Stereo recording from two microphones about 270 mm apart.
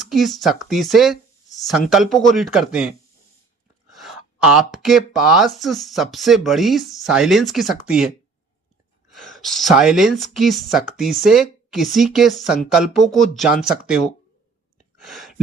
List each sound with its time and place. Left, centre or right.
0.0 s speech: centre
3.9 s speech: centre
9.1 s speech: centre
15.0 s speech: centre